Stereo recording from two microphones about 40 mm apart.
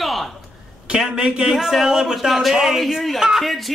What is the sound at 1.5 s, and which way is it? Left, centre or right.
A man's voice, centre.